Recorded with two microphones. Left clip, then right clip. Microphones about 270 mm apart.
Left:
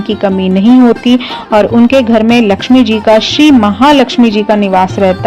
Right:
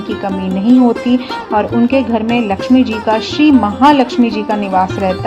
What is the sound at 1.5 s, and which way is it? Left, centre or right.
Speech, left.